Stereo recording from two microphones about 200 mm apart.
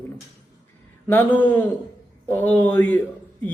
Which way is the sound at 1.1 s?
10° left (ahead or behind).